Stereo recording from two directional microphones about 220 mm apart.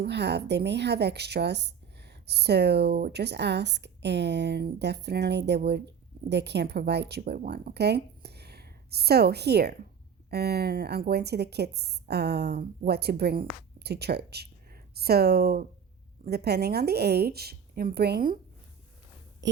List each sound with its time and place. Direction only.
0.0 s a woman's voice: 50° right (ahead or behind)